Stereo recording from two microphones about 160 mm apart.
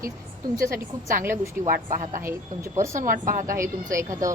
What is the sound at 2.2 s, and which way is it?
Speech, 15° right (ahead or behind).